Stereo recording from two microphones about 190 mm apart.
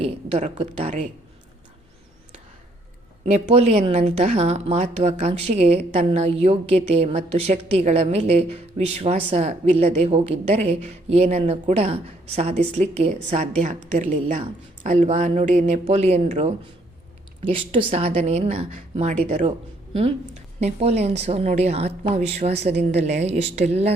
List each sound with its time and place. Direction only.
0.0 s speech: 35° right (ahead or behind)
3.2 s speech: 35° right (ahead or behind)